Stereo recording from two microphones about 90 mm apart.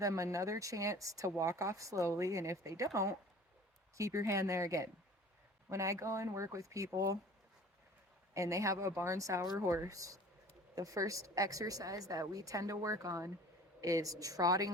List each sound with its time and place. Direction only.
0.0 s speech: 35° right (ahead or behind)
8.3 s speech: 35° right (ahead or behind)